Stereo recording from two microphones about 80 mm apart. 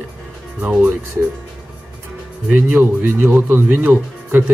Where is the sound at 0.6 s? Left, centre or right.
Centre.